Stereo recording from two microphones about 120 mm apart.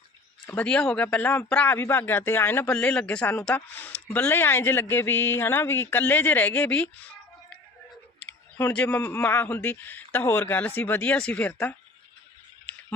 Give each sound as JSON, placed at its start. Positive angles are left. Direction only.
{"t": 0.5, "sound": "a man's voice", "side_deg": 10}
{"t": 8.2, "sound": "a sound", "side_deg": 15}
{"t": 9.2, "sound": "a man's voice", "side_deg": 15}